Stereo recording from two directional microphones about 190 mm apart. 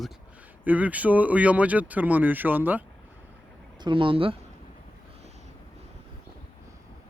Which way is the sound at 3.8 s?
25° right (ahead or behind).